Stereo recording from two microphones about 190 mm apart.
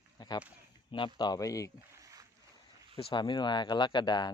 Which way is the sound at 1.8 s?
15° right (ahead or behind).